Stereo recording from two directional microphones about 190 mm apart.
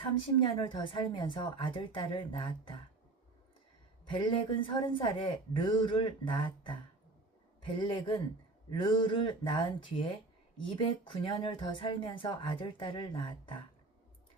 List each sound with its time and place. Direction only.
0.4 s speech: 25° left (ahead or behind)
4.1 s speech: 25° left (ahead or behind)